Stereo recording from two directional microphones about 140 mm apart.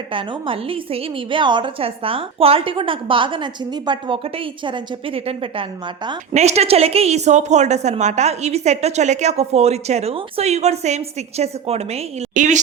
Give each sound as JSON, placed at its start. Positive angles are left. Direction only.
{"t": 0.1, "sound": "a woman's voice", "side_deg": -40}
{"t": 6.3, "sound": "a woman's voice", "side_deg": -50}
{"t": 12.3, "sound": "a woman's voice", "side_deg": -65}